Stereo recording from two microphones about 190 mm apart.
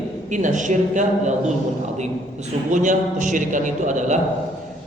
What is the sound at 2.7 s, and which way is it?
A man's voice, 40° right (ahead or behind).